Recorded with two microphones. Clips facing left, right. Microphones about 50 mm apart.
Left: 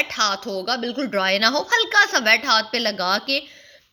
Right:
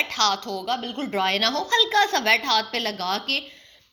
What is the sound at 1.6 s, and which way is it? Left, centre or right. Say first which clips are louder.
A woman's voice: even; left.